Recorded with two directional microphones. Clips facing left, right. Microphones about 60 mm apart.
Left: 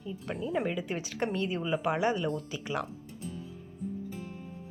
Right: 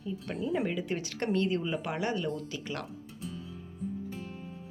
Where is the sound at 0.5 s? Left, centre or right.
Centre.